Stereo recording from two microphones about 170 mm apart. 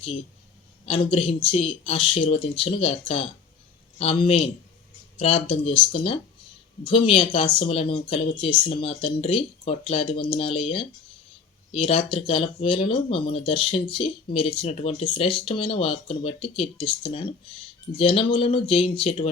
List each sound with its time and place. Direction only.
0.0 s speech: 35° left (ahead or behind)